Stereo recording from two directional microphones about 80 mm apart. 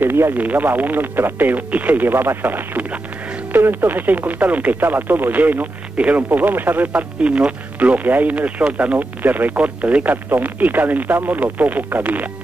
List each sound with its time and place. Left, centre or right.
0.0 s speech: right